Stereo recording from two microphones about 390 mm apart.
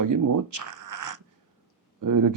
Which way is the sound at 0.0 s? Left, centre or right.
Right.